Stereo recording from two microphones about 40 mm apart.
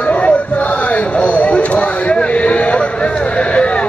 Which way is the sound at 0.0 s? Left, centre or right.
Left.